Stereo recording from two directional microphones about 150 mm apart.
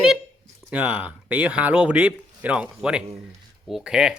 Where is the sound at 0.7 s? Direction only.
10° right (ahead or behind).